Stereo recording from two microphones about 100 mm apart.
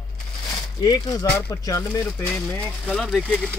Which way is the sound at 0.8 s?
40° left (ahead or behind).